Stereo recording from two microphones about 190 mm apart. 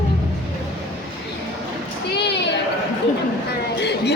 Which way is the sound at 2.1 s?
60° left (ahead or behind).